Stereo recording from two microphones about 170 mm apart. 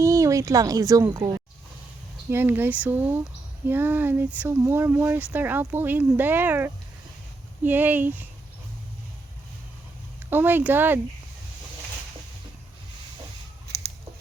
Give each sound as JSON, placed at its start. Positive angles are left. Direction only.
{"t": 0.0, "sound": "a woman's voice", "side_deg": -20}
{"t": 10.2, "sound": "speech", "side_deg": -10}
{"t": 13.7, "sound": "a sound", "side_deg": -75}